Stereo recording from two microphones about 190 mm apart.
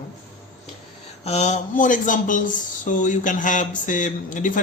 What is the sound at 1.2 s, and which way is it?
Speech, 35° left (ahead or behind).